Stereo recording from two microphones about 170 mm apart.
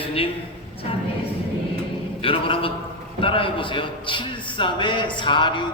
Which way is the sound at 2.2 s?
30° left (ahead or behind).